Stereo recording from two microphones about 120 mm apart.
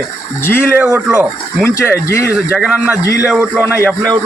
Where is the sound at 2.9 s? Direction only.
25° left (ahead or behind).